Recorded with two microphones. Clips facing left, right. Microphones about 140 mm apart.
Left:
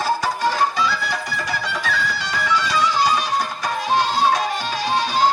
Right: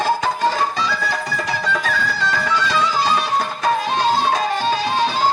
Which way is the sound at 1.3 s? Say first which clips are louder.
Right 4 dB; 45° right (ahead or behind).